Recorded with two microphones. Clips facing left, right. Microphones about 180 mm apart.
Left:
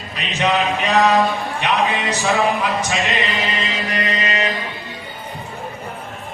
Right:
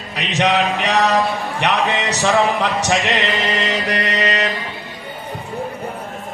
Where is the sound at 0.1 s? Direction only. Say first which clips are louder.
Right 2 dB; 80° right.